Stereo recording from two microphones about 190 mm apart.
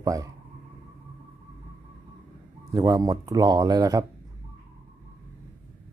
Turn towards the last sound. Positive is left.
turn(degrees=-20)  # may be behind; listen again after turning